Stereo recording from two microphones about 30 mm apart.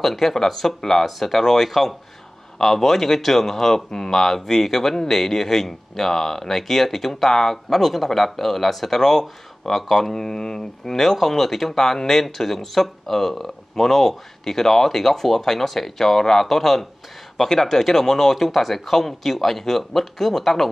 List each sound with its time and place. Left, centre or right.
0.0 s speech: centre
10.1 s mantra: left
11.0 s speech: centre